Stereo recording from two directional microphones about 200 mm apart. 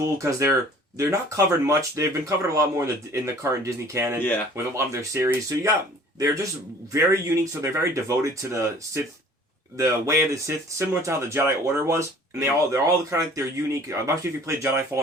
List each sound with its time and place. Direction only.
0.0 s speech: 15° right (ahead or behind)
1.6 s speech: 15° right (ahead or behind)